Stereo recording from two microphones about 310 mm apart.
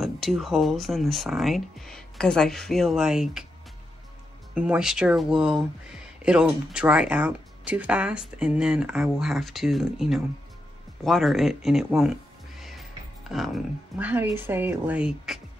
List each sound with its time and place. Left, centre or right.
0.0 s speech: centre
4.6 s speech: centre